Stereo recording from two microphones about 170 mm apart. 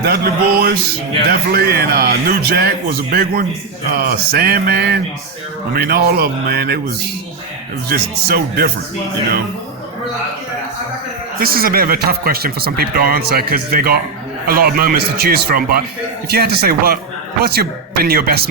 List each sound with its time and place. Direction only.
0.0 s speech: 65° right (ahead or behind)
11.3 s speech: 60° right (ahead or behind)